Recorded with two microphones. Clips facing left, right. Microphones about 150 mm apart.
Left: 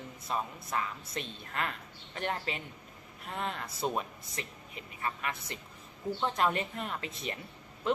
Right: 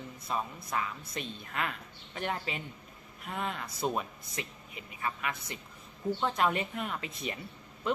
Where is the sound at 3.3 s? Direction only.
5° right (ahead or behind).